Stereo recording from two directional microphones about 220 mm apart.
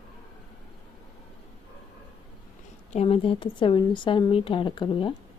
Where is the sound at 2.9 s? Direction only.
25° left (ahead or behind).